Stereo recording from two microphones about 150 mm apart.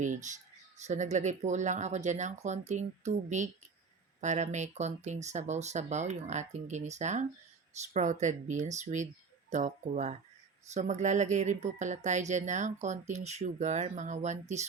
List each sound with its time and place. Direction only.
0.0 s speech: 55° right (ahead or behind)